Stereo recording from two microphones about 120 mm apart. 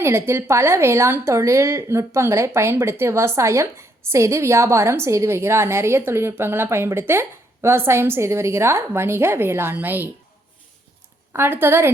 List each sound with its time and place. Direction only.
0.0 s a woman's voice: 20° right (ahead or behind)
11.3 s a woman's voice: 20° right (ahead or behind)